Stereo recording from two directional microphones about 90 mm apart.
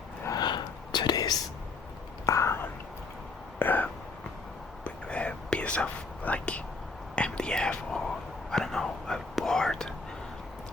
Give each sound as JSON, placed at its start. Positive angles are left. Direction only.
{"t": 0.3, "sound": "whispering", "side_deg": 55}
{"t": 2.2, "sound": "whispering", "side_deg": 35}
{"t": 3.6, "sound": "a sound", "side_deg": 20}
{"t": 4.8, "sound": "whispering", "side_deg": 15}